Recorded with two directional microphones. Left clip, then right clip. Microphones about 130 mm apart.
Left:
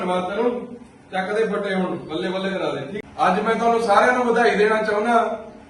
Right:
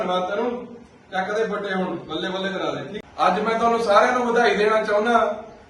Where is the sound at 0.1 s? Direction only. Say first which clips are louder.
Left 4 dB; centre (ahead or behind).